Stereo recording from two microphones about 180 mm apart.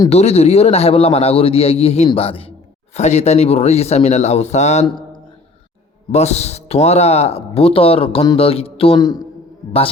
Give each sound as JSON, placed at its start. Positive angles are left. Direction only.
{"t": 0.1, "sound": "speech", "side_deg": 35}
{"t": 6.1, "sound": "speech", "side_deg": 35}